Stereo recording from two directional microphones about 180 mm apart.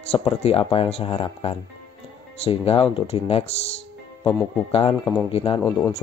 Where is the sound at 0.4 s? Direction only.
35° left (ahead or behind).